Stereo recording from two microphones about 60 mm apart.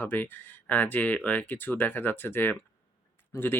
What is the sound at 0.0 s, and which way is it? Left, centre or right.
Speech, left.